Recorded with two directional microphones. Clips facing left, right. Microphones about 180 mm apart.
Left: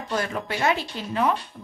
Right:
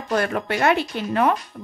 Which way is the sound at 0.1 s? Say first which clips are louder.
Right 6 dB; 60° right (ahead or behind).